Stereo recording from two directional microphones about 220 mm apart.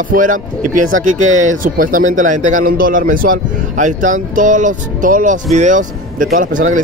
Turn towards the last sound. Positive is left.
turn(degrees=-35)  # may be behind; listen again after turning